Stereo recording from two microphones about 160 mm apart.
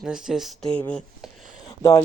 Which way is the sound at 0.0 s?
5° right (ahead or behind).